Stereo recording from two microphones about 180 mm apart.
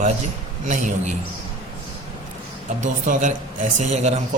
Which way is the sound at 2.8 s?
45° right (ahead or behind).